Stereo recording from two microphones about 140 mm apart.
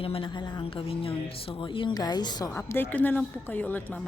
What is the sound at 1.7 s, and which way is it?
Speech, 35° left (ahead or behind).